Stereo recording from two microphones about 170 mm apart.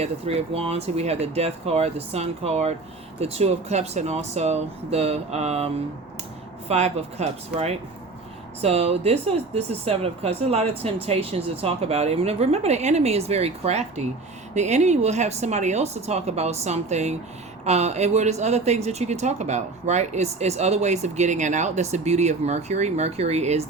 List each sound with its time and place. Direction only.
0.0 s speech: 35° right (ahead or behind)